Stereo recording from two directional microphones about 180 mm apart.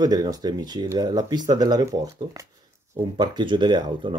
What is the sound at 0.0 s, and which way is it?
Speech, 20° right (ahead or behind).